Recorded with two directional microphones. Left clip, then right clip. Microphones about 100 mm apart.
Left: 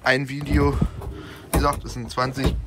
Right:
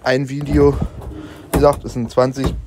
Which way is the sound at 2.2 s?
90° right.